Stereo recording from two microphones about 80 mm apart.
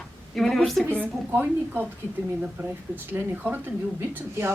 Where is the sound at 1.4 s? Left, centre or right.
Right.